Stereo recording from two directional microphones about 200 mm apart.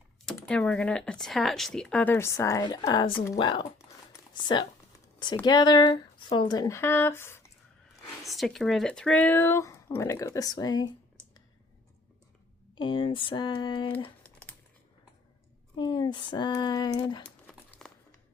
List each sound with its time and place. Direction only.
0.3 s speech: 5° left (ahead or behind)
8.2 s speech: centre (ahead or behind); by 10.8 s 20° left (ahead or behind)
12.7 s speech: 25° left (ahead or behind)
15.7 s speech: 20° left (ahead or behind)
17.2 s crumpling: 5° left (ahead or behind)